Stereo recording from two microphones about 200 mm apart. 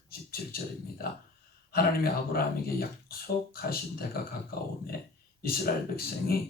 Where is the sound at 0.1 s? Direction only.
50° left (ahead or behind).